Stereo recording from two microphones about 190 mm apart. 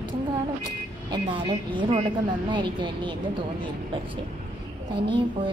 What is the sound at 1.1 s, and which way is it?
A woman's voice, 25° right (ahead or behind).